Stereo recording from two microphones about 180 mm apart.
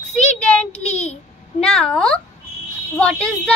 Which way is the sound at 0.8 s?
40° left (ahead or behind).